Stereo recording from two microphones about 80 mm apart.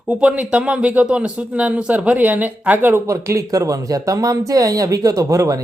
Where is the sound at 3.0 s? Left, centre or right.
Right.